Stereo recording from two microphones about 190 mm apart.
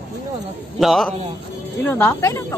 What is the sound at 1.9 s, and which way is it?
Speech, 10° left (ahead or behind).